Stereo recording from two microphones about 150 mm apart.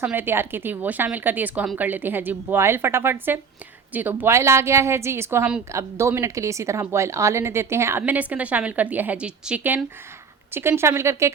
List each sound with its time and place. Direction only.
0.0 s a woman's voice: 10° right (ahead or behind)